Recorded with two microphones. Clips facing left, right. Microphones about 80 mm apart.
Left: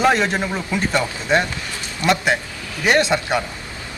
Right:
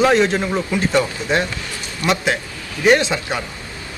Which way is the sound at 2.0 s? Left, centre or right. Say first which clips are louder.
Left 1 dB; left.